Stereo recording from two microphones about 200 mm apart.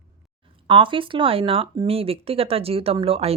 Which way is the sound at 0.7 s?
25° right (ahead or behind).